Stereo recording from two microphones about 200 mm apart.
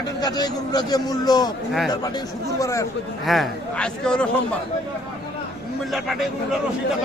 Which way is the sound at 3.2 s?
Centre (ahead or behind).